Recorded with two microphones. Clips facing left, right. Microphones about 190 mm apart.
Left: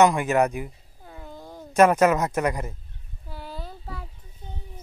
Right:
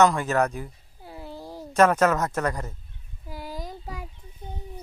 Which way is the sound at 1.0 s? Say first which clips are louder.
Right 3 dB; 10° right (ahead or behind).